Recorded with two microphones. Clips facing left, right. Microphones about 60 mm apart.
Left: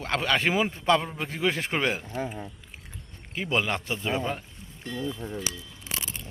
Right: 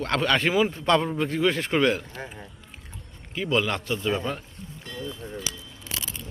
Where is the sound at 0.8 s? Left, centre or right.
Centre.